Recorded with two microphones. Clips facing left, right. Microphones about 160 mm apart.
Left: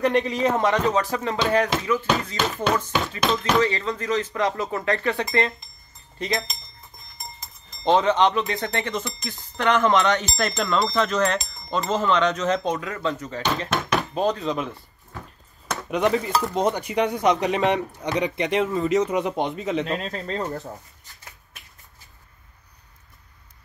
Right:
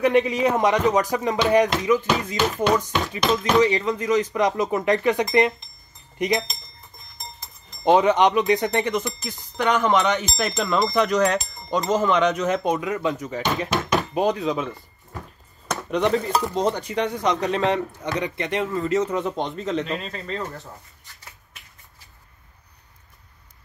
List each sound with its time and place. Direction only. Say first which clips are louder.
0.0 s speech: right 2 dB; 10° right (ahead or behind)
3.2 s speech: right 2 dB; centre (ahead or behind)
3.5 s speech: right 3 dB; 15° right (ahead or behind)
7.8 s speech: right 2 dB; 15° right (ahead or behind)
10.6 s speech: right 1 dB; centre (ahead or behind)
10.9 s speech: right 2 dB; 15° right (ahead or behind); by 19.9 s 10° left (ahead or behind)
20.0 s speech: left 2 dB; 40° left (ahead or behind)